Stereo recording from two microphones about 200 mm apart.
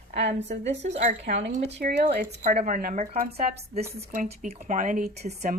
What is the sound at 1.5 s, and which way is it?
Speech, 50° right (ahead or behind).